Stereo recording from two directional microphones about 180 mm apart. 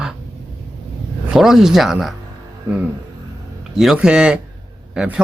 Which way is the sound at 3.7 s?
5° right (ahead or behind).